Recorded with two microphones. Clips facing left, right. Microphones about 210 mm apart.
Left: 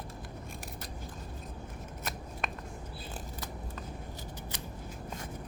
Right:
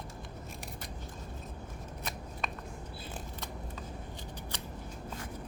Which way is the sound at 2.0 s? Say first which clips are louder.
Left 1 dB; 5° left (ahead or behind).